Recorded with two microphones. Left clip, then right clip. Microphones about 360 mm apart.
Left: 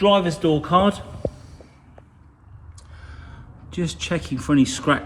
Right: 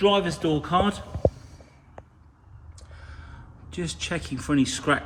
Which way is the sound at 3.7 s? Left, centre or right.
Centre.